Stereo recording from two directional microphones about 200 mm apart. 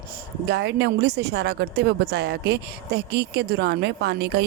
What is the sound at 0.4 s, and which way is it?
A woman's voice, 55° right (ahead or behind).